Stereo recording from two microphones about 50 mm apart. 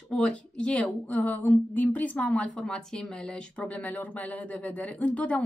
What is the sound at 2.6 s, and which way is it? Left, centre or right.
Speech, centre.